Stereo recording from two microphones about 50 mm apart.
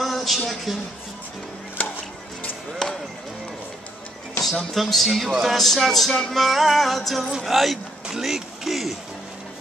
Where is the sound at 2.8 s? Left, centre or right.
Centre.